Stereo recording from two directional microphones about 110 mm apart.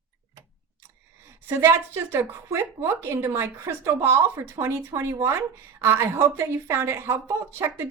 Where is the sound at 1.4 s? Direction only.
20° right (ahead or behind).